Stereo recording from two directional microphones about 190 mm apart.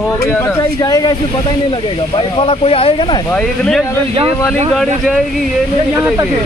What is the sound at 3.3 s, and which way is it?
Speech, 5° left (ahead or behind).